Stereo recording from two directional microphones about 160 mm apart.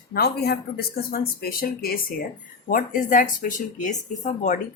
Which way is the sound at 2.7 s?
60° left (ahead or behind).